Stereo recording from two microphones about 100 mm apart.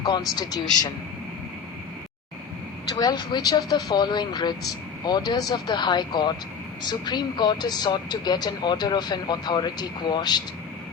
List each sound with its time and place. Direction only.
0.0 s speech: 45° left (ahead or behind)
2.9 s speech: 40° left (ahead or behind)